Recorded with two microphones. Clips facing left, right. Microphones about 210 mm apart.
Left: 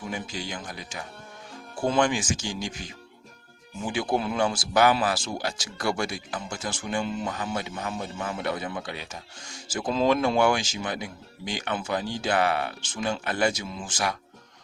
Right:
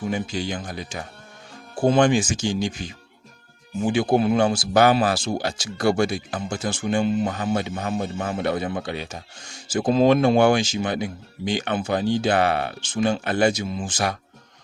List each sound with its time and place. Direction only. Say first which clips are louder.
0.1 s speech: right 7 dB; 25° right (ahead or behind)